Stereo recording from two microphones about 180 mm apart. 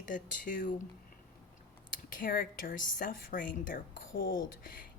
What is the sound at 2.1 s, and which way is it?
Speech, 50° left (ahead or behind).